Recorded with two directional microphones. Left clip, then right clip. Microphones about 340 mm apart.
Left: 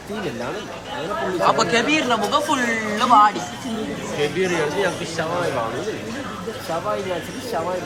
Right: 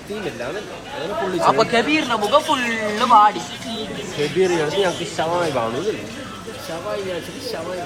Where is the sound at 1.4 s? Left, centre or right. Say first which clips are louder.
Right 1 dB; centre.